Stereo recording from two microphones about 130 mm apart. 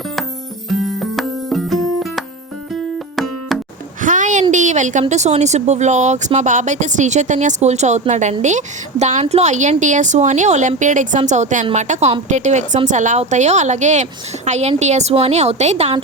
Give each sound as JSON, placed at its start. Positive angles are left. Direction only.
{"t": 0.7, "sound": "music", "side_deg": 0}
{"t": 3.5, "sound": "music", "side_deg": 0}
{"t": 4.0, "sound": "a sound", "side_deg": -75}
{"t": 4.5, "sound": "a woman's voice", "side_deg": -70}